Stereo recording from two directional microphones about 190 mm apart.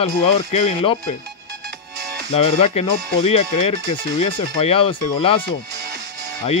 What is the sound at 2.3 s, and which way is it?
Speech, 30° left (ahead or behind).